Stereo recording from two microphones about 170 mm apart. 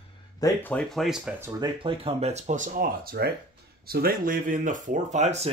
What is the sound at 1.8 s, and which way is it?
Speech, 35° right (ahead or behind).